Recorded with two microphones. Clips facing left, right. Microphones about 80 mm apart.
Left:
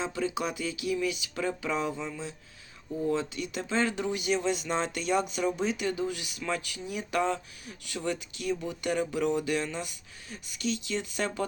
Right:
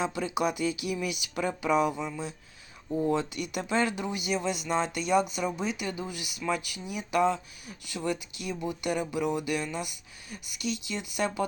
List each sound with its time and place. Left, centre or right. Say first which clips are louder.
0.0 s speech: right 1 dB; centre
0.3 s a sound: right 4 dB; centre
1.4 s speech: right 5 dB; centre
2.9 s a sound: right 2 dB; right
3.5 s speech: right 1 dB; centre
3.9 s speech: left 2 dB; centre